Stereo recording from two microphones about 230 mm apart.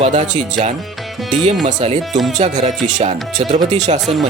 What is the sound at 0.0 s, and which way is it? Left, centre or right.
Speech, right.